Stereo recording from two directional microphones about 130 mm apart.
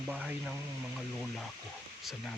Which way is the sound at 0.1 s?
10° right (ahead or behind).